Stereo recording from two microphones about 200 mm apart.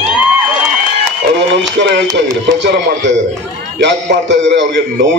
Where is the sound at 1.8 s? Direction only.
60° right (ahead or behind).